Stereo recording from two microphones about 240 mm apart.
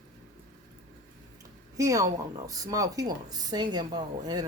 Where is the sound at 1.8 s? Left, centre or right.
Centre.